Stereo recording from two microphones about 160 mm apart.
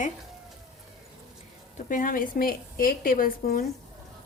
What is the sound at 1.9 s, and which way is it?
A woman's voice, 60° left (ahead or behind).